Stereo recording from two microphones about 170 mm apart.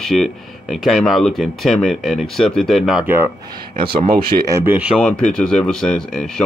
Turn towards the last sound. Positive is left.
turn(degrees=5)  # may be behind; listen again after turning